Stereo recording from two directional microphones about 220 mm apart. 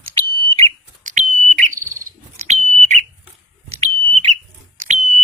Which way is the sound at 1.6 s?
35° right (ahead or behind).